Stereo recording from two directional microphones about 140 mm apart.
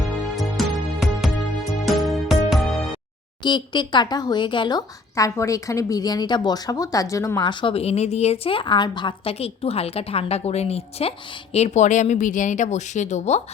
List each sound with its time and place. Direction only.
0.3 s music: centre (ahead or behind)
3.4 s speech: 35° left (ahead or behind)
5.1 s a woman's voice: 25° left (ahead or behind)
7.4 s speech: 35° left (ahead or behind); by 13.4 s 55° left (ahead or behind)